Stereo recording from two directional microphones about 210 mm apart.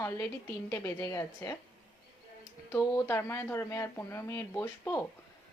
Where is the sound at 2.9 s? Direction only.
10° left (ahead or behind).